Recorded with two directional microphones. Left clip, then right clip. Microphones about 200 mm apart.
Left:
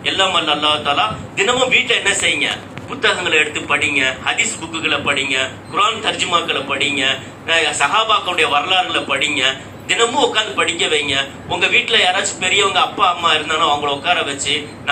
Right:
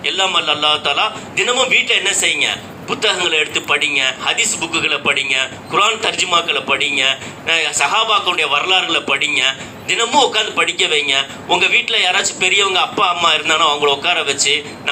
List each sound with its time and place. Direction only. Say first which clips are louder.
0.0 s a man's voice: even; 45° right (ahead or behind)